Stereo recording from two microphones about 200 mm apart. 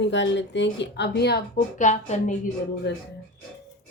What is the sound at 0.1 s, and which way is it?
Speech, 60° left (ahead or behind).